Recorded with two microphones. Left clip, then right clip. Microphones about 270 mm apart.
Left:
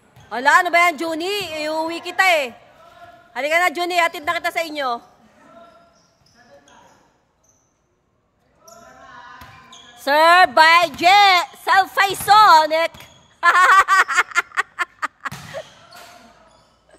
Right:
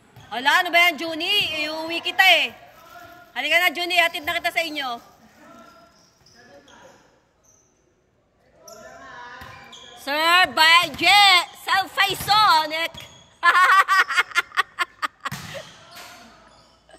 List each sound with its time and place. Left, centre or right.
0.3 s a woman's voice: centre
10.0 s speech: centre